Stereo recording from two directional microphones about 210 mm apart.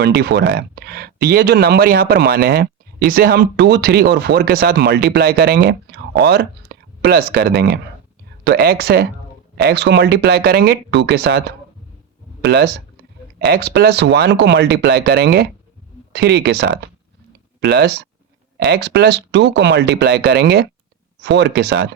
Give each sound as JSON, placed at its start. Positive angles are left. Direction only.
{"t": 0.0, "sound": "speech", "side_deg": -50}